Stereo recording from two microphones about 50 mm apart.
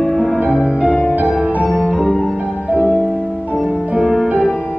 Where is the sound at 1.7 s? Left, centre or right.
Centre.